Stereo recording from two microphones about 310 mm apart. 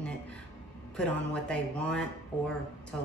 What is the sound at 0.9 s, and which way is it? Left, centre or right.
Speech, centre.